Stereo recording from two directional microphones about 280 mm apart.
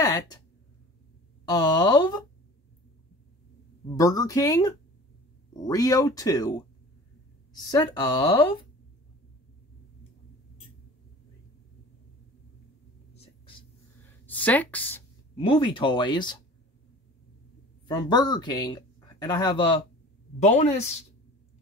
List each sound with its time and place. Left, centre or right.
0.0 s a sound: centre
1.5 s speech: centre
3.9 s speech: centre
7.5 s speech: centre
13.1 s whispering: centre
14.2 s speech: centre
17.8 s speech: centre